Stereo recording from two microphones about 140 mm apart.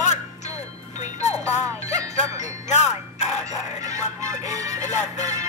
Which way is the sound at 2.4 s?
55° left (ahead or behind).